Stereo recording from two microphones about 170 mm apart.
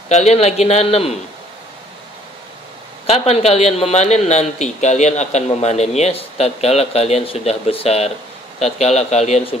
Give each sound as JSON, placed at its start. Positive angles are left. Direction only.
{"t": 0.1, "sound": "a man's voice", "side_deg": 40}
{"t": 3.1, "sound": "a man's voice", "side_deg": 35}